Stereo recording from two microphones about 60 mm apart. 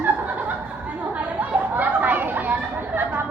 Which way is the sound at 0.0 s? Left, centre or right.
Right.